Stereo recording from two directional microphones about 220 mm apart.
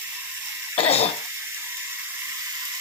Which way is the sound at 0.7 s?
30° left (ahead or behind).